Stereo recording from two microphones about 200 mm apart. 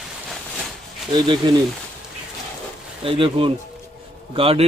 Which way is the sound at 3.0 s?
25° right (ahead or behind).